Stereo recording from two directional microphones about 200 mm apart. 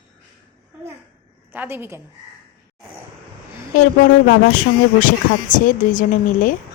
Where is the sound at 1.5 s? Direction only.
10° right (ahead or behind).